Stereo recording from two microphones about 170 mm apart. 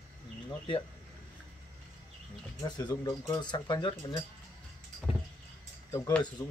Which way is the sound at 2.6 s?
25° left (ahead or behind).